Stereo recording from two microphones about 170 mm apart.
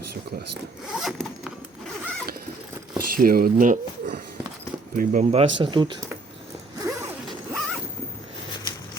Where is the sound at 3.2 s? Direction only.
60° right (ahead or behind).